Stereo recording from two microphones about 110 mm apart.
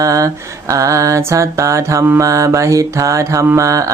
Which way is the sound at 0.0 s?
30° right (ahead or behind).